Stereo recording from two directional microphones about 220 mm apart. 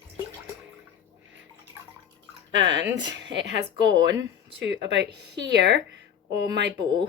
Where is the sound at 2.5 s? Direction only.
55° right (ahead or behind).